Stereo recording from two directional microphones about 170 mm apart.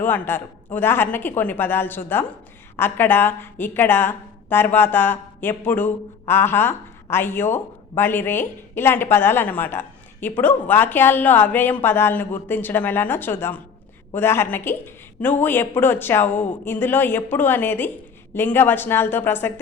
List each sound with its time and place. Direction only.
0.0 s a woman's voice: 10° left (ahead or behind)